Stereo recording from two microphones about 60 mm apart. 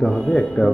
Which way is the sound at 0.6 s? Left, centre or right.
Left.